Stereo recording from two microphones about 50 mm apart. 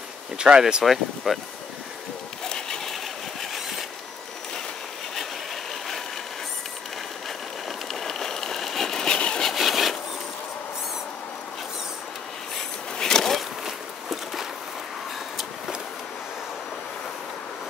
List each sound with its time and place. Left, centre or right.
0.4 s speech: centre
0.8 s speech: centre
2.4 s sewing machine: centre
7.9 s vehicle: centre
9.5 s wood: centre
12.9 s a sound: centre
13.7 s a sound: centre